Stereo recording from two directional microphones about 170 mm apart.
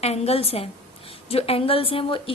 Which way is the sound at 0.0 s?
35° left (ahead or behind).